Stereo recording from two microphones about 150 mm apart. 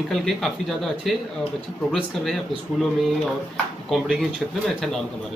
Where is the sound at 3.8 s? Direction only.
5° right (ahead or behind).